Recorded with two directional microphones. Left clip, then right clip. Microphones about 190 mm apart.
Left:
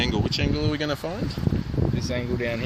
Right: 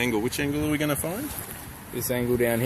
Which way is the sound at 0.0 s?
15° left (ahead or behind).